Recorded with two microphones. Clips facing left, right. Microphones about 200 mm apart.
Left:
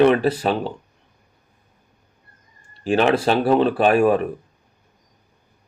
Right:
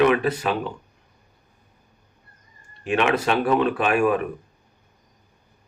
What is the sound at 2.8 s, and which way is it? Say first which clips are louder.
Speech: left 4 dB; 35° left (ahead or behind).